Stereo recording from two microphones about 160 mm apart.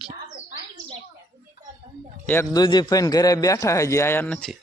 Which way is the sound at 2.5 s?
25° left (ahead or behind).